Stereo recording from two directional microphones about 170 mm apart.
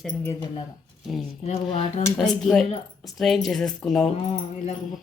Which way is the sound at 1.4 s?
40° left (ahead or behind).